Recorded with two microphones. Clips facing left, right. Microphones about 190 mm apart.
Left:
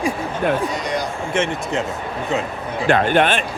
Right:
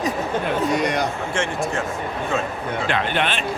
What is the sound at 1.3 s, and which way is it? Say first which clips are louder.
Speech: left 2 dB; 20° left (ahead or behind).